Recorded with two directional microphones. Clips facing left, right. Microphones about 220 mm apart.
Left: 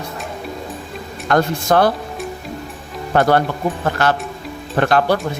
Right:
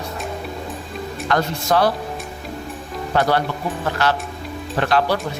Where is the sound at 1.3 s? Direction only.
50° left (ahead or behind).